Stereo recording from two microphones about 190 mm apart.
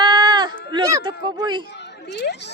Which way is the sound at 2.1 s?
65° left (ahead or behind).